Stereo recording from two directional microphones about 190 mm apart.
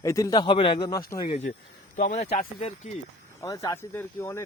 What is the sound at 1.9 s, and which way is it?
Speech, 45° left (ahead or behind).